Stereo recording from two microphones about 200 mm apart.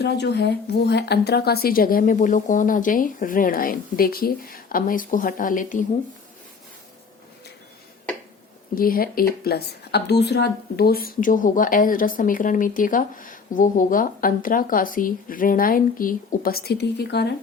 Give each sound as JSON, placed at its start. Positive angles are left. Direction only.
{"t": 0.0, "sound": "speech", "side_deg": 55}
{"t": 8.7, "sound": "speech", "side_deg": 45}